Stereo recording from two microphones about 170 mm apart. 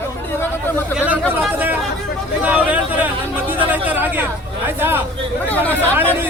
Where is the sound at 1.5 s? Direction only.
10° right (ahead or behind).